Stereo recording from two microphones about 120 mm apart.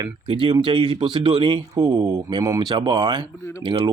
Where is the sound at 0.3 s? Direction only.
45° right (ahead or behind).